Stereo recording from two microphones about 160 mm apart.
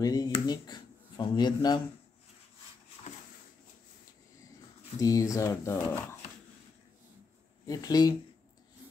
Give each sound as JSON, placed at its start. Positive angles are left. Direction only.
{"t": 0.0, "sound": "speech", "side_deg": 25}
{"t": 4.9, "sound": "speech", "side_deg": 20}
{"t": 7.6, "sound": "speech", "side_deg": 25}